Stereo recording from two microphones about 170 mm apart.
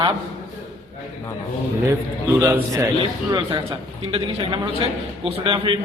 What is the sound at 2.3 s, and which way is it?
Speech, 20° right (ahead or behind).